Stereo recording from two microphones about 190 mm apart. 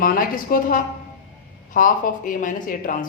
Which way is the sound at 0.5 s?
50° left (ahead or behind).